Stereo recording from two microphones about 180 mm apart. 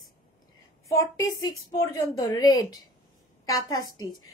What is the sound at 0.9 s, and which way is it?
A woman's voice, 20° left (ahead or behind).